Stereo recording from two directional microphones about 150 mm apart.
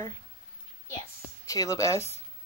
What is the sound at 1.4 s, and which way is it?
Speech, 20° left (ahead or behind).